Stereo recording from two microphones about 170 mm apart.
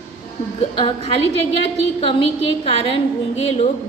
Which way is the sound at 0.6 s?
30° left (ahead or behind).